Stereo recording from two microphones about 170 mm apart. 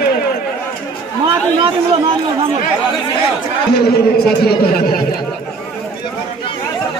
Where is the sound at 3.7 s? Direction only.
65° left (ahead or behind).